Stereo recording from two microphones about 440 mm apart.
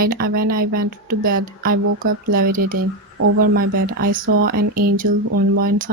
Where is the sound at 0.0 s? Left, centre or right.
Centre.